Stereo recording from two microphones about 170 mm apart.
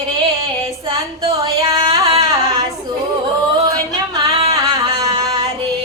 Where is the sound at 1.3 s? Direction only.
20° right (ahead or behind).